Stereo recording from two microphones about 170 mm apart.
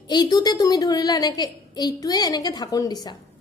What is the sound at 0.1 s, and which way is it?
A woman's voice, 25° left (ahead or behind).